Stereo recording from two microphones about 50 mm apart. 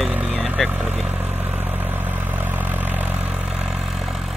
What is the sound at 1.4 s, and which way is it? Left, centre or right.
Vehicle, right.